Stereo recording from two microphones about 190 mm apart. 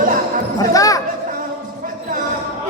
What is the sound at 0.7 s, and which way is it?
Music, 20° left (ahead or behind).